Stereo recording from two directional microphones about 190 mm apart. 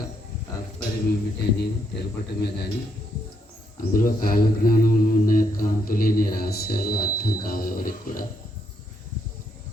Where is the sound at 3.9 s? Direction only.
50° left (ahead or behind).